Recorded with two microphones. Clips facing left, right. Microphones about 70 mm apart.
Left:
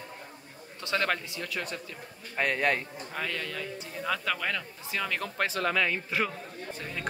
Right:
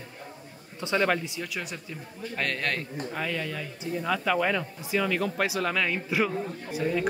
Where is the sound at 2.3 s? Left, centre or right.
Centre.